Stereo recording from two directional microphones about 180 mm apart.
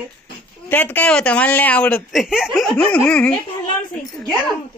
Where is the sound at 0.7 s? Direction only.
10° left (ahead or behind).